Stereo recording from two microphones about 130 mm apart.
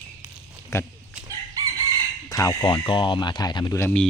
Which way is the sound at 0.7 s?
25° left (ahead or behind).